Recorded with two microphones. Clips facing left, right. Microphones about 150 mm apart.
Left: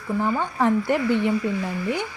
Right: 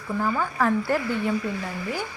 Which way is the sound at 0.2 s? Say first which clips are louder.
Left 1 dB; 20° left (ahead or behind).